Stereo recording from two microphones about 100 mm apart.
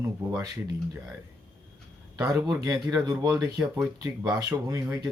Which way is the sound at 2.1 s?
30° right (ahead or behind).